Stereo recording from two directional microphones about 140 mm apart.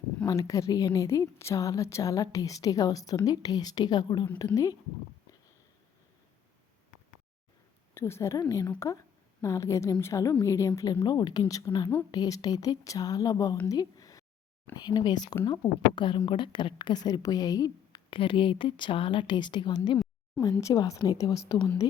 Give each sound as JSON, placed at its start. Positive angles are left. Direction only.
{"t": 0.3, "sound": "a woman's voice", "side_deg": 25}
{"t": 7.9, "sound": "a woman's voice", "side_deg": 15}
{"t": 13.7, "sound": "a sound", "side_deg": 25}
{"t": 14.8, "sound": "a woman's voice", "side_deg": 30}